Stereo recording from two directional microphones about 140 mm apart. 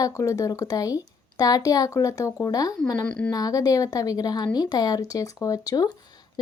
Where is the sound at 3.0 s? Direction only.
10° left (ahead or behind).